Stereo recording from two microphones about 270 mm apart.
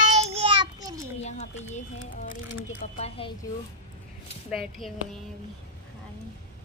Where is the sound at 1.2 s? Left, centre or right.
Left.